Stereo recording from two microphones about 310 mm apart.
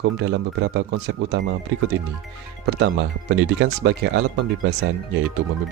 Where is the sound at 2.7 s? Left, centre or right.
Right.